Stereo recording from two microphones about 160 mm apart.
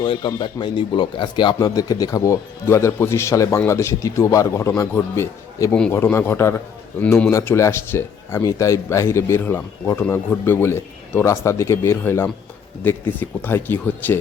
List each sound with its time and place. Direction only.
0.0 s speech: 30° left (ahead or behind); by 14.2 s 15° left (ahead or behind)